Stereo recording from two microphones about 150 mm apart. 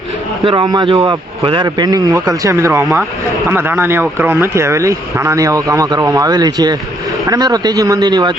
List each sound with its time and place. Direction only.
0.4 s speech: 30° right (ahead or behind)